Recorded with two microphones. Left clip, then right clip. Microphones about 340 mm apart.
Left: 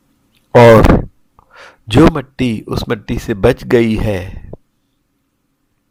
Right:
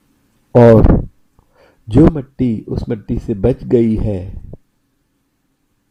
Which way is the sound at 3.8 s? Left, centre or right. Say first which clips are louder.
Left 1 dB; left.